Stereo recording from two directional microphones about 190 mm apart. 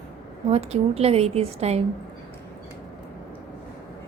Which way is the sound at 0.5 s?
35° right (ahead or behind).